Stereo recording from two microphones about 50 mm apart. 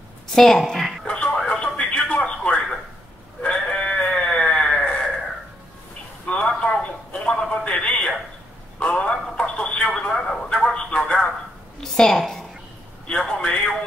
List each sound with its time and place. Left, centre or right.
0.3 s a woman's voice: centre
1.0 s radio: left
3.4 s sheep: centre
6.2 s a sound: centre
8.7 s telephone: left
11.8 s a sound: centre